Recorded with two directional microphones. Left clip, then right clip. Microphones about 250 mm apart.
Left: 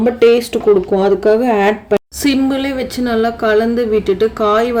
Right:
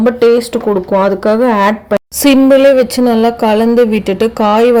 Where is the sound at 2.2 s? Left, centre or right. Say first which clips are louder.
Right 11 dB; centre.